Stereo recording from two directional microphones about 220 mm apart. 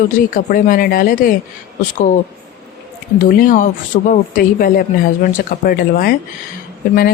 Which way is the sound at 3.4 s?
35° left (ahead or behind).